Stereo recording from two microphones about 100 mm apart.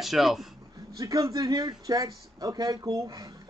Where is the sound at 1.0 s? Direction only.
35° right (ahead or behind).